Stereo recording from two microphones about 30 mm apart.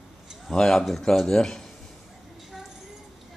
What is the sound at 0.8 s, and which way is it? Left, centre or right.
Speech, centre.